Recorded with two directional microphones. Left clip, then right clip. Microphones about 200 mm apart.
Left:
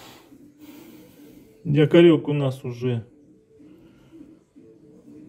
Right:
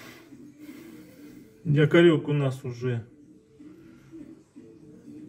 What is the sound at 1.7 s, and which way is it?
Speech, 25° left (ahead or behind).